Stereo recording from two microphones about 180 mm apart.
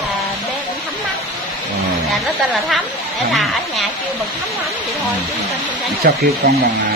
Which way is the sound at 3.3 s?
Centre (ahead or behind).